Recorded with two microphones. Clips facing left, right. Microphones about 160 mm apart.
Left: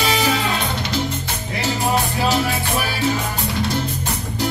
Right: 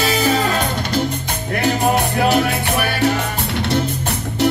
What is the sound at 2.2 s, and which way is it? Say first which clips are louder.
Music: right 4 dB; 60° right (ahead or behind).